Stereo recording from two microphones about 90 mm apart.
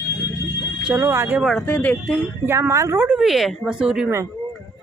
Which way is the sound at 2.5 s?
30° right (ahead or behind).